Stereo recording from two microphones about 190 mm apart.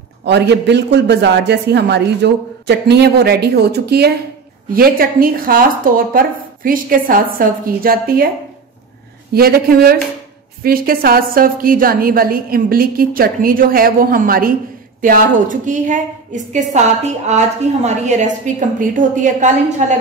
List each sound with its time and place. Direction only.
0.2 s a woman's voice: 65° right (ahead or behind)
9.3 s a woman's voice: 55° right (ahead or behind)